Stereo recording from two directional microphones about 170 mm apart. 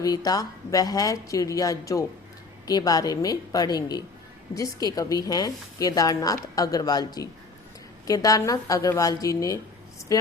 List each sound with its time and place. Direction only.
0.0 s a woman's voice: 20° left (ahead or behind)